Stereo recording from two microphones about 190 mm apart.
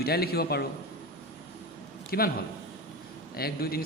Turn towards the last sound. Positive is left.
turn(degrees=55)  # may be behind; listen again after turning